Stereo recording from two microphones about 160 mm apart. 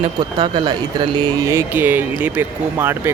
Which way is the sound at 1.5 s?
15° right (ahead or behind).